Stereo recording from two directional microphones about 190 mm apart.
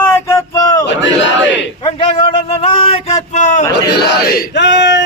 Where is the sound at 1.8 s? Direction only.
25° left (ahead or behind).